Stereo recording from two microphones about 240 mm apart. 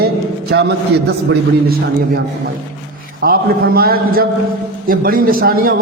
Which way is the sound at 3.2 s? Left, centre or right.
Right.